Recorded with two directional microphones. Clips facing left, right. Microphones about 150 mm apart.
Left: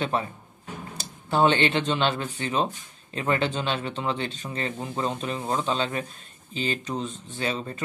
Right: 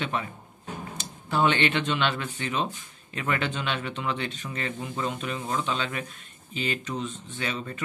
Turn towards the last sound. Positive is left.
turn(degrees=35)  # may be behind; listen again after turning